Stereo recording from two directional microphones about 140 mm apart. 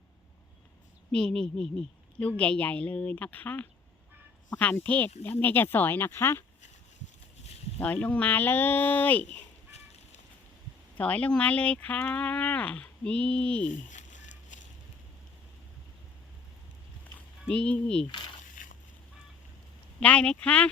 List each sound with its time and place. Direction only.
1.1 s speech: 5° left (ahead or behind)
7.8 s speech: 10° left (ahead or behind)
10.9 s speech: 10° left (ahead or behind)
13.7 s a sound: 65° left (ahead or behind)
17.5 s speech: 10° left (ahead or behind)
18.6 s boat: 70° left (ahead or behind)
20.0 s speech: 10° left (ahead or behind)